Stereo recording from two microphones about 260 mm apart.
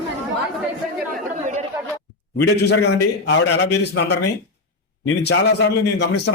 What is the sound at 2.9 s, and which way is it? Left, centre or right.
A man's voice, left.